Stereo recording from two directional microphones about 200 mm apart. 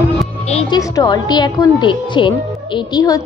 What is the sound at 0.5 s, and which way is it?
Speech, 30° left (ahead or behind).